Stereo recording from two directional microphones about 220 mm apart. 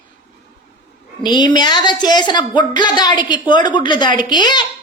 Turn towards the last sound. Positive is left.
turn(degrees=20)  # may be behind; listen again after turning